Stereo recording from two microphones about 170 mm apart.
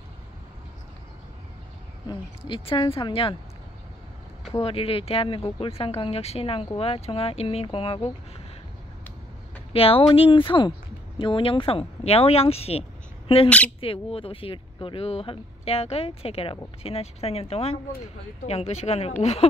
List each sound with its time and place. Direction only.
2.0 s speech: 30° left (ahead or behind)
4.5 s speech: 35° left (ahead or behind)
9.7 s speech: 35° left (ahead or behind)